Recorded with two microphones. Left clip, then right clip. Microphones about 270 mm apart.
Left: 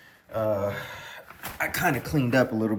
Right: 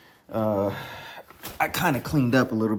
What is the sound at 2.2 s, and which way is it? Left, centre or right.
Speech, centre.